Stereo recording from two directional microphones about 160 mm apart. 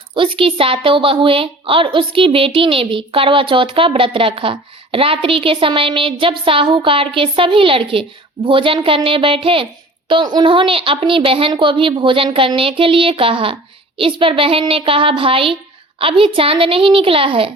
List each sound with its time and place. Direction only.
0.1 s a woman's voice: 35° right (ahead or behind)